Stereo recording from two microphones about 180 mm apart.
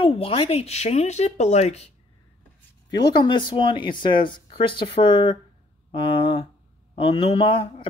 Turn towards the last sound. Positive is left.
turn(degrees=30)  # may be behind; listen again after turning